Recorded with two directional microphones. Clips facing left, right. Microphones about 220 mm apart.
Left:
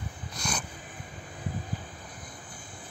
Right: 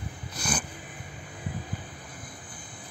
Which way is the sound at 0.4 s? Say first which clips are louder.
Right 3 dB; 5° right (ahead or behind).